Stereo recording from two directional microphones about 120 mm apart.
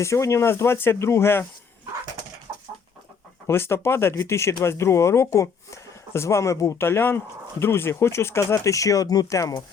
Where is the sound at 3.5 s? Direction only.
20° left (ahead or behind).